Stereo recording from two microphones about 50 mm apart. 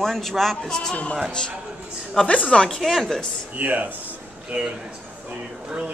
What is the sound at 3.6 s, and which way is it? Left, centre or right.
A man's voice, right.